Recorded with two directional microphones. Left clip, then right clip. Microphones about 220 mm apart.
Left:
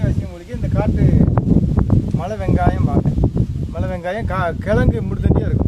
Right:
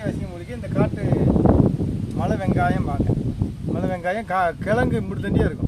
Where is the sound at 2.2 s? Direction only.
15° left (ahead or behind).